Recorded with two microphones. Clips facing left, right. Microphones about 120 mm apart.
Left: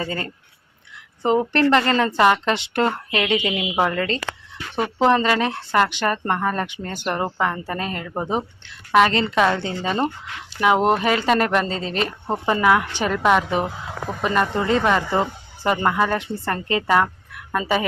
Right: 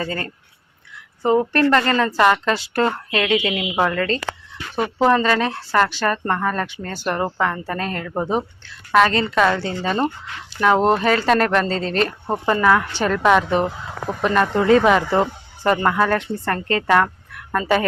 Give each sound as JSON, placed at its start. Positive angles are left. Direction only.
{"t": 0.0, "sound": "a woman's voice", "side_deg": 25}
{"t": 1.5, "sound": "a woman's voice", "side_deg": 20}
{"t": 15.6, "sound": "a woman's voice", "side_deg": 10}